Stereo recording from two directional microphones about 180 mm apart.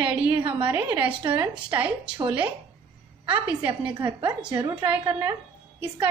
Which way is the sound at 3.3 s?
10° right (ahead or behind).